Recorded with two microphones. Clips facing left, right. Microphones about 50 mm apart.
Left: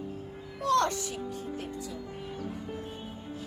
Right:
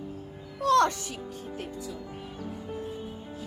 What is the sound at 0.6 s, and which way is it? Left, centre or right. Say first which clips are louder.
Music: right 4 dB; right.